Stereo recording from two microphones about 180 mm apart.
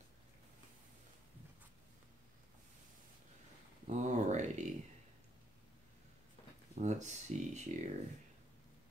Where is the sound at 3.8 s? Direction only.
40° right (ahead or behind).